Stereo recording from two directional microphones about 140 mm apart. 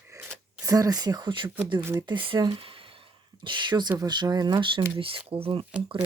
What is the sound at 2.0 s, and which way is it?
Speech, 35° right (ahead or behind).